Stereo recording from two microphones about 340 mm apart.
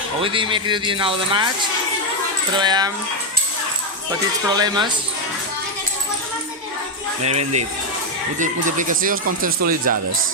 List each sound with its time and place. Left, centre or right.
0.2 s speech: centre
2.6 s speech: centre
4.4 s speech: centre
8.4 s speech: right